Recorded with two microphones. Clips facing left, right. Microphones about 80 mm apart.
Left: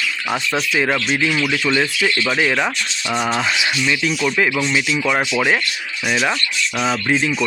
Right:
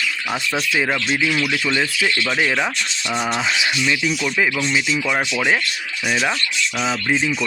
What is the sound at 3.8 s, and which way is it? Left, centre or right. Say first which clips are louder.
Speech: left 1 dB; centre.